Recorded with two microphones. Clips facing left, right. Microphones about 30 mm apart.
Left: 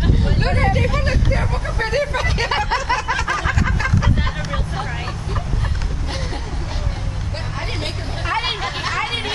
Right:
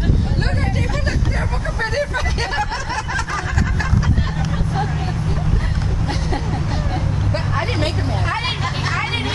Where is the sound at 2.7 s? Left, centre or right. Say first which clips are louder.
Left 5 dB; left.